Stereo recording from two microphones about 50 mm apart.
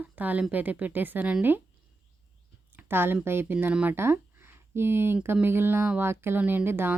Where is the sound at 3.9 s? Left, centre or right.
Right.